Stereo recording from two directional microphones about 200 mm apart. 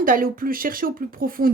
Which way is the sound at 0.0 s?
45° right (ahead or behind).